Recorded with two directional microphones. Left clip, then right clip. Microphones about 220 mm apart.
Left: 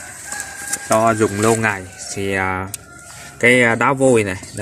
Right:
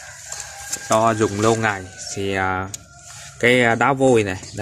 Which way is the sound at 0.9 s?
5° left (ahead or behind).